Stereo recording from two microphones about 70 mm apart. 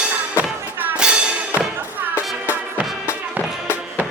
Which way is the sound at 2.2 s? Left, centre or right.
Left.